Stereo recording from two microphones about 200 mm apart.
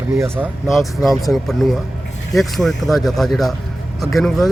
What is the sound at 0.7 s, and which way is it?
Speech, centre (ahead or behind).